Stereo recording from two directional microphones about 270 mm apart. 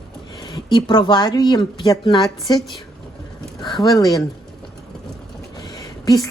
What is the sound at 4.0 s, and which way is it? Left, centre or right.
Speech, centre.